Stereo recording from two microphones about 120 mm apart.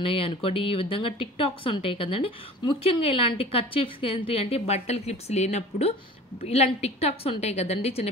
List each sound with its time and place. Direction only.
0.0 s a woman's voice: 50° left (ahead or behind)